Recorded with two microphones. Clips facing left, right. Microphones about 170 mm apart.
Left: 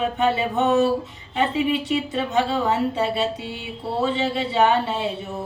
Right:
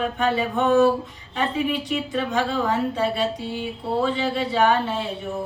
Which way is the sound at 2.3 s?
25° left (ahead or behind).